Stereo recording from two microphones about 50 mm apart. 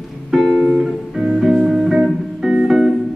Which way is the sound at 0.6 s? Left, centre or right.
Centre.